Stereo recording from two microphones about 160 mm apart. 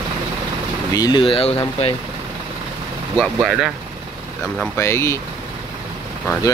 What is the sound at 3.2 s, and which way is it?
Speech, 5° right (ahead or behind).